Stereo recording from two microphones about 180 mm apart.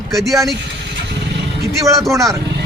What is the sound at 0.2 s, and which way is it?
Speech, centre (ahead or behind).